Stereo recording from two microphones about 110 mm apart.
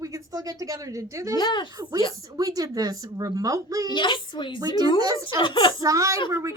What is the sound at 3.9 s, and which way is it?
Speech, 45° left (ahead or behind).